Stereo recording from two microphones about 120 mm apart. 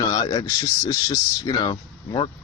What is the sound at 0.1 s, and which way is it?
Speech, 35° left (ahead or behind).